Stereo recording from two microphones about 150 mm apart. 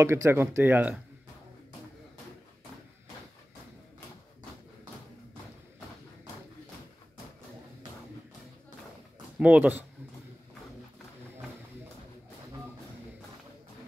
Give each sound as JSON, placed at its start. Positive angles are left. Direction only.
{"t": 0.0, "sound": "speech", "side_deg": -20}
{"t": 9.4, "sound": "speech", "side_deg": -10}